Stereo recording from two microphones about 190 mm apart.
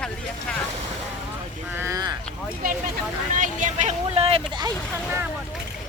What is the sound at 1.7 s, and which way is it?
Speech, 15° right (ahead or behind).